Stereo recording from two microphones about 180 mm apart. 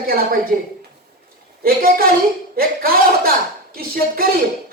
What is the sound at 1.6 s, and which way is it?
Speech, 55° right (ahead or behind).